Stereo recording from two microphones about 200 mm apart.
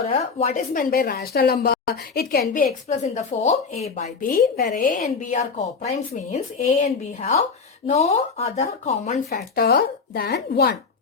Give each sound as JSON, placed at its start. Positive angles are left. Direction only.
{"t": 0.0, "sound": "a woman's voice", "side_deg": 35}
{"t": 9.3, "sound": "a woman's voice", "side_deg": 50}